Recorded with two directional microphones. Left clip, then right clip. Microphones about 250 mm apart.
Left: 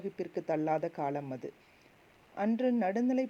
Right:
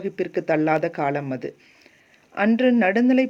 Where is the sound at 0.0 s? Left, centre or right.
Centre.